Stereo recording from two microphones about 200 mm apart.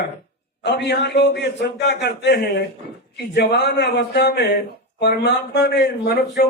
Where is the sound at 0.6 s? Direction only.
55° left (ahead or behind).